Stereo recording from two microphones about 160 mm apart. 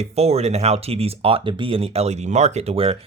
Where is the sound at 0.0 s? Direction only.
40° right (ahead or behind).